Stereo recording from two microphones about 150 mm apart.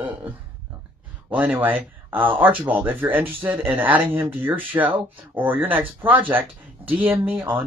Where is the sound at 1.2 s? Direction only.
10° right (ahead or behind).